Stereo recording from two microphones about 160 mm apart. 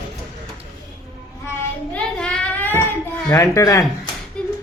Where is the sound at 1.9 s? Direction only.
5° left (ahead or behind); by 3.8 s 20° left (ahead or behind).